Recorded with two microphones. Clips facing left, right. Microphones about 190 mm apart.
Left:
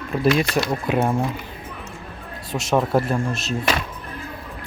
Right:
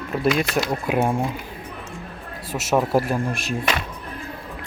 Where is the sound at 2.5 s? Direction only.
5° right (ahead or behind).